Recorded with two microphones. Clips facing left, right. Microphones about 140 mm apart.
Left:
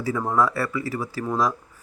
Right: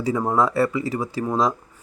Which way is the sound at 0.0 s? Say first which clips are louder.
Right 2 dB; 20° right (ahead or behind).